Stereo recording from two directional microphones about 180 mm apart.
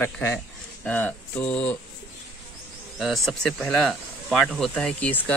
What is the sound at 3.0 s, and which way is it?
Speech, centre (ahead or behind).